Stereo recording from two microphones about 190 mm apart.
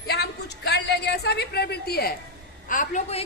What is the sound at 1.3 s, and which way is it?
Speech, 60° left (ahead or behind).